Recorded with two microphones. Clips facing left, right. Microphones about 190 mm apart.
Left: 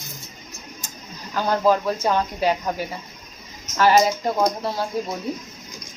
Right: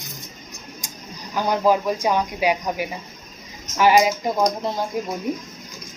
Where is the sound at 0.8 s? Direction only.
10° right (ahead or behind).